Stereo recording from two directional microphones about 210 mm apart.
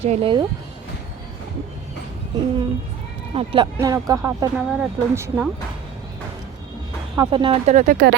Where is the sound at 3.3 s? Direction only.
25° right (ahead or behind).